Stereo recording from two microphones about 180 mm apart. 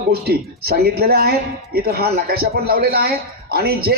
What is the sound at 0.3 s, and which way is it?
A woman's voice, 60° right (ahead or behind).